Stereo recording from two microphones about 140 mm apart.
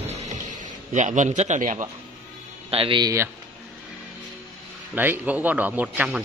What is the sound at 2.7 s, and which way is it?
Speech, 40° right (ahead or behind).